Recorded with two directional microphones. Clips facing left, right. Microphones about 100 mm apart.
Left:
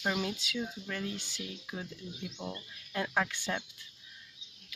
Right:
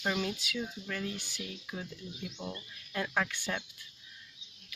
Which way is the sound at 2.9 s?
15° left (ahead or behind).